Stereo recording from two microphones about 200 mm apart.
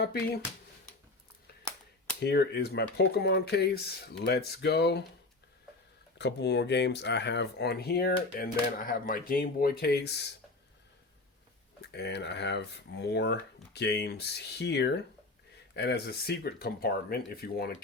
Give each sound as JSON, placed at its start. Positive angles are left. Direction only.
{"t": 2.2, "sound": "speech", "side_deg": 55}
{"t": 6.1, "sound": "speech", "side_deg": 60}
{"t": 11.9, "sound": "speech", "side_deg": 60}